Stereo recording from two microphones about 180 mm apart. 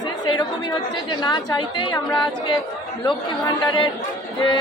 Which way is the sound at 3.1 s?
25° left (ahead or behind).